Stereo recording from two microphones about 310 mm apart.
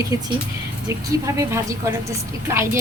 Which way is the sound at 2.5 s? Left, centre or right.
Centre.